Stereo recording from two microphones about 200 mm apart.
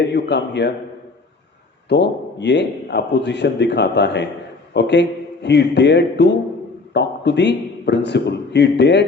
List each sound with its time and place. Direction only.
0.0 s a man's voice: 60° left (ahead or behind)
1.9 s a man's voice: 60° left (ahead or behind)